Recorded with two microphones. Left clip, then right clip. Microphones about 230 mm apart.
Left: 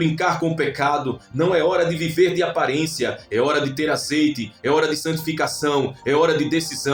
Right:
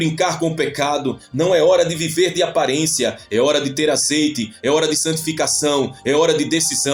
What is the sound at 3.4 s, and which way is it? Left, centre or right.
Speech, right.